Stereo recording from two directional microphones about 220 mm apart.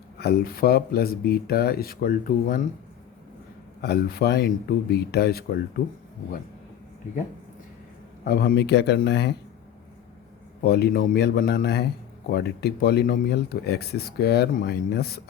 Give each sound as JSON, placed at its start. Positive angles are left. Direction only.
{"t": 0.2, "sound": "speech", "side_deg": 45}
{"t": 3.8, "sound": "speech", "side_deg": 45}
{"t": 8.2, "sound": "speech", "side_deg": 45}
{"t": 10.6, "sound": "speech", "side_deg": 45}